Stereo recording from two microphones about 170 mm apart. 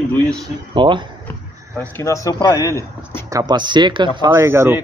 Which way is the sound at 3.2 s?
20° right (ahead or behind).